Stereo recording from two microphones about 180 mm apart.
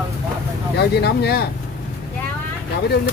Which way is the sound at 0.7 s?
65° left (ahead or behind).